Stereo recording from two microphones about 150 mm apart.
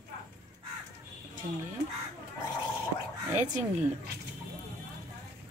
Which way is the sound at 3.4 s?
55° right (ahead or behind).